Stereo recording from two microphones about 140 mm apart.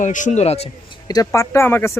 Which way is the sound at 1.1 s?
25° left (ahead or behind).